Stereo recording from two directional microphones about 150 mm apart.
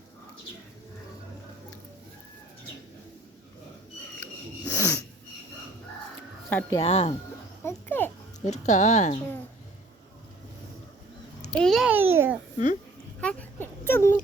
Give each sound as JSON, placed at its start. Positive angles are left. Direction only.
{"t": 4.2, "sound": "snort", "side_deg": 10}
{"t": 6.5, "sound": "speech", "side_deg": 10}
{"t": 6.8, "sound": "speech", "side_deg": 40}
{"t": 7.6, "sound": "a sound", "side_deg": 15}
{"t": 8.4, "sound": "speech", "side_deg": 50}
{"t": 11.5, "sound": "a child's voice", "side_deg": 0}
{"t": 11.9, "sound": "a child's voice", "side_deg": -15}
{"t": 13.2, "sound": "a sound", "side_deg": 10}